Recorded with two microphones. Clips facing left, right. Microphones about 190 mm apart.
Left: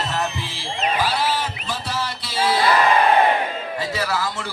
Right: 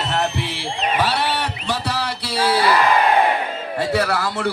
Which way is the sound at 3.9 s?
65° right (ahead or behind).